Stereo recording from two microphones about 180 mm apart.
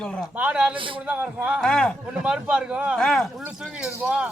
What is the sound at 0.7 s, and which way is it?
Speech, 30° right (ahead or behind).